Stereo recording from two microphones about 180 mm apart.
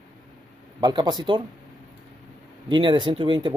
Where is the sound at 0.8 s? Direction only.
25° right (ahead or behind).